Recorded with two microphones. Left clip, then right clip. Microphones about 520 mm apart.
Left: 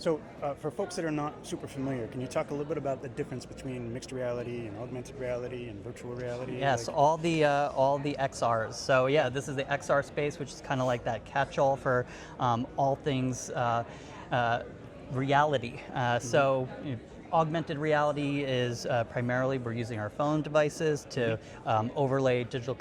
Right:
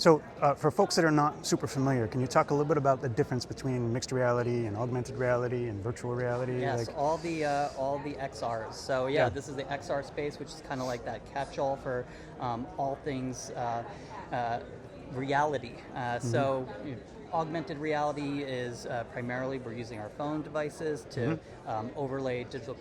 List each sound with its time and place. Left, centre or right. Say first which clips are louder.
0.0 s speech: right 8 dB; right
6.6 s speech: left 5 dB; left